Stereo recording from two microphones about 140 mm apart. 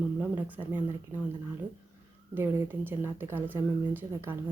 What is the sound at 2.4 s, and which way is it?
Speech, 15° right (ahead or behind).